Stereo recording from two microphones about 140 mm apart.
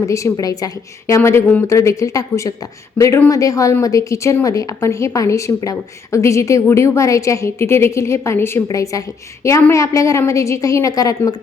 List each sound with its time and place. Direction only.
0.0 s a woman's voice: 20° left (ahead or behind)